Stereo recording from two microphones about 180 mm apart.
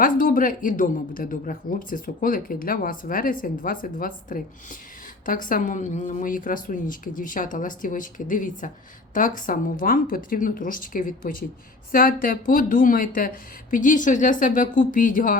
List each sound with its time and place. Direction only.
0.0 s speech: 50° left (ahead or behind)